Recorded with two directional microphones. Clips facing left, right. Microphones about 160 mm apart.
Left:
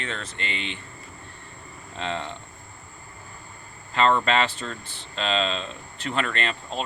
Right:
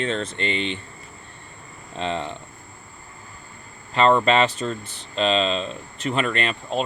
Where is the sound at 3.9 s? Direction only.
20° right (ahead or behind).